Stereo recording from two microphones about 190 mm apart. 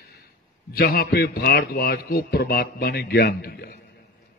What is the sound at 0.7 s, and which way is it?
A man's voice, 55° left (ahead or behind).